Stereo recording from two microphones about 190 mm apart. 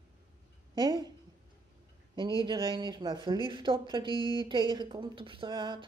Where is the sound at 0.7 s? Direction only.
25° right (ahead or behind).